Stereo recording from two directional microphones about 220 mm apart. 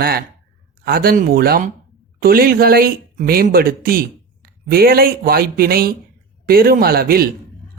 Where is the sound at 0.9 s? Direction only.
40° right (ahead or behind).